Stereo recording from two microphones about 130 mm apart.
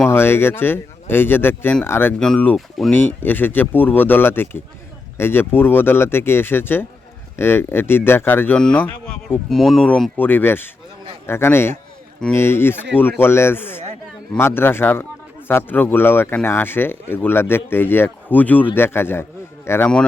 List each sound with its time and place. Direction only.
0.0 s speech: 20° left (ahead or behind)
2.1 s speech: 5° left (ahead or behind)
2.9 s speech: 15° left (ahead or behind)
9.5 s speech: centre (ahead or behind); by 19.9 s 20° left (ahead or behind)